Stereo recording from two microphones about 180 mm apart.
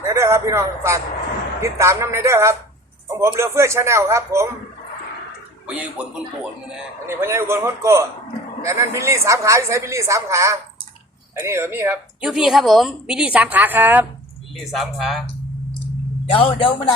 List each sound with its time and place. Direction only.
0.1 s a man's voice: 15° right (ahead or behind)
5.6 s a woman's voice: 5° right (ahead or behind)
14.5 s speech: centre (ahead or behind)
16.3 s speech: 30° left (ahead or behind)